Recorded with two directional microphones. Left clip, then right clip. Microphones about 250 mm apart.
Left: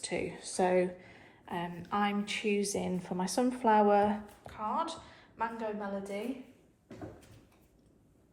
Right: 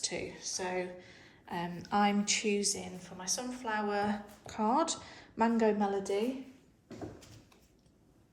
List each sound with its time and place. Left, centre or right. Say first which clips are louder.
0.0 s a woman's voice: left 1 dB; centre
4.5 s a woman's voice: right 4 dB; right